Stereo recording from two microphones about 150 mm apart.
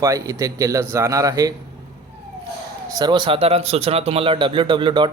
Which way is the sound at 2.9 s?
25° right (ahead or behind).